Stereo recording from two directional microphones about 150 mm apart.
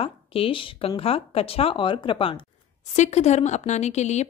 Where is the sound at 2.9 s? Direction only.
50° left (ahead or behind).